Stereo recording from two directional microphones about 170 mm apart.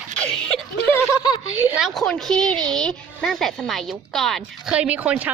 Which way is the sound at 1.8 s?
Centre (ahead or behind).